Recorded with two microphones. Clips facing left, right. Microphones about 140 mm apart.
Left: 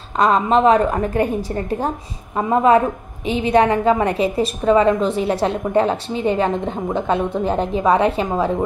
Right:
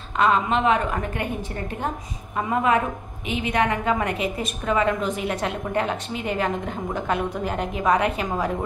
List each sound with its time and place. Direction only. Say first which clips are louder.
0.2 s a woman's voice: left 6 dB; 40° left (ahead or behind)